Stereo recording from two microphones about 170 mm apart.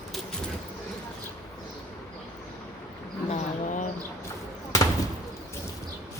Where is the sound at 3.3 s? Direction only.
50° left (ahead or behind).